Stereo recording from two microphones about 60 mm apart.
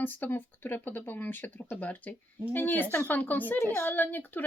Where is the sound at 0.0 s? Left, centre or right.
Left.